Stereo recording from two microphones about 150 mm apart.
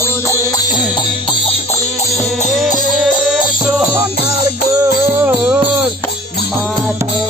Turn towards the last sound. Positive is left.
turn(degrees=-10)  # may be behind; listen again after turning